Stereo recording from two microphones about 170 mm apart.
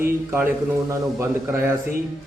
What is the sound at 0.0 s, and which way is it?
A man's voice, 15° right (ahead or behind).